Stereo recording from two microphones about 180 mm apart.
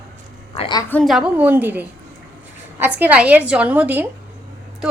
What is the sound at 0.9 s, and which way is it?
A woman's voice, 5° left (ahead or behind).